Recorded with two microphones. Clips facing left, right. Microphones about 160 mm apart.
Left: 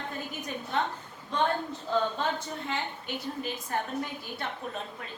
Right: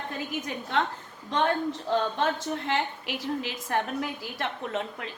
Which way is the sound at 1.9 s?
75° right (ahead or behind).